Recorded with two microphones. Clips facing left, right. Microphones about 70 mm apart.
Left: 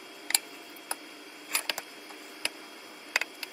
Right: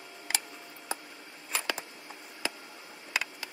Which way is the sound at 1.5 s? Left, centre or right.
Centre.